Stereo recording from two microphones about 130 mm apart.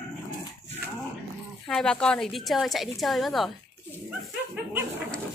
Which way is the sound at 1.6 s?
5° left (ahead or behind).